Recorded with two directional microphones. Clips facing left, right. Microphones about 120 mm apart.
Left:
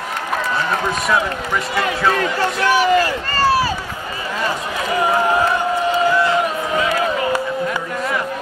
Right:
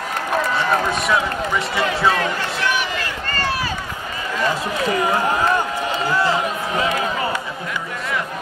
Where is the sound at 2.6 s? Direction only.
40° left (ahead or behind).